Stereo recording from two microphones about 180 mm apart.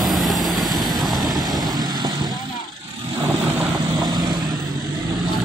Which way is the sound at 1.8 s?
25° right (ahead or behind).